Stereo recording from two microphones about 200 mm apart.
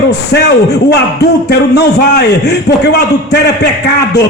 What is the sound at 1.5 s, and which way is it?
A man's voice, 55° left (ahead or behind).